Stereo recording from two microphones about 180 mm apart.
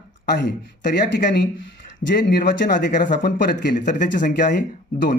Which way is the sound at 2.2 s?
50° left (ahead or behind).